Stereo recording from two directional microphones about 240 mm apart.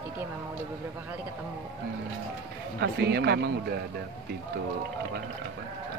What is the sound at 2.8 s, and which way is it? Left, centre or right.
Speech, right.